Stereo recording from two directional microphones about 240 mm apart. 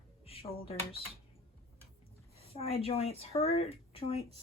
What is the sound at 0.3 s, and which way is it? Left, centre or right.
Speech, left.